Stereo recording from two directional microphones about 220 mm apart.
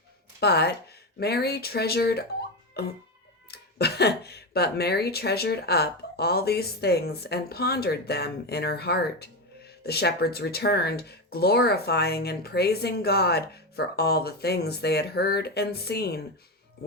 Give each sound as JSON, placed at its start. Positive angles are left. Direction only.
{"t": 0.3, "sound": "speech", "side_deg": 50}
{"t": 2.8, "sound": "music", "side_deg": 45}
{"t": 3.5, "sound": "speech", "side_deg": 45}